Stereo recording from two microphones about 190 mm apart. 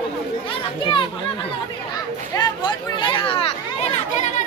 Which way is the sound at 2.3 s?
20° left (ahead or behind).